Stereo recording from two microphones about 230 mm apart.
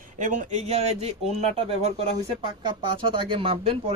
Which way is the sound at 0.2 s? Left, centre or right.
Right.